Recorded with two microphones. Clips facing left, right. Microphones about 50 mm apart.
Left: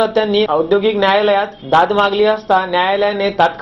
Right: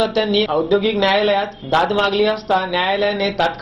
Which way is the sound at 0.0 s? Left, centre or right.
Left.